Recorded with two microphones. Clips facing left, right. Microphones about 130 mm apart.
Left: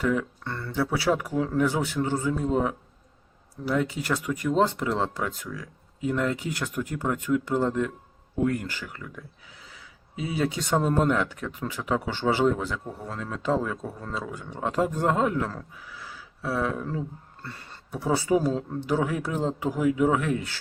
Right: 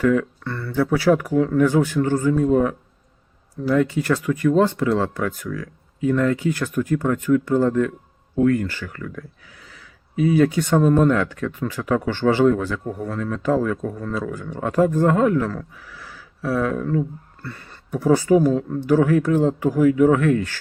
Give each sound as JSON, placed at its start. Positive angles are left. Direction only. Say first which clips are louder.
{"t": 0.1, "sound": "speech", "louder": "right 7 dB", "side_deg": 20}